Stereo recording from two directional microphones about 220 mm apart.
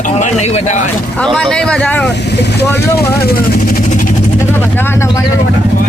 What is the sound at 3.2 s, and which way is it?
Vehicle, 40° left (ahead or behind).